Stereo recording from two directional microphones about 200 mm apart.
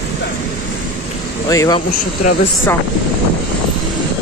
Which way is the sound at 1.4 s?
15° left (ahead or behind).